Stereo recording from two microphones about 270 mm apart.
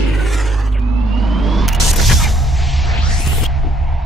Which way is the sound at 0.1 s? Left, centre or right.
Centre.